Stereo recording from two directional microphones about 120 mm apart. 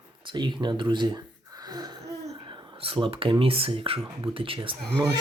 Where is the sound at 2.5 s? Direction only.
45° right (ahead or behind).